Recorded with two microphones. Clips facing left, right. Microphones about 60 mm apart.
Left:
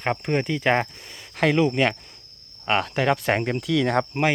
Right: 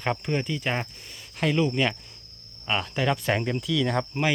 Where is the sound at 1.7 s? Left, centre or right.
Left.